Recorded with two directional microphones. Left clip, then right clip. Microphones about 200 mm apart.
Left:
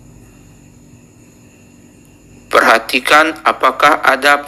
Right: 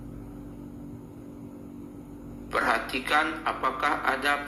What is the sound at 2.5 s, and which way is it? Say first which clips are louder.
A man's voice: left 16 dB; 50° left (ahead or behind).